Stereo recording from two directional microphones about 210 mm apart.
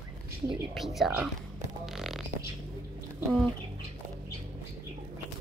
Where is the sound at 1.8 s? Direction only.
Centre (ahead or behind).